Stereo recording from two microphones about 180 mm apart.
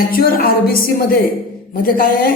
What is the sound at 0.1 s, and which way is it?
A man's voice, 55° left (ahead or behind).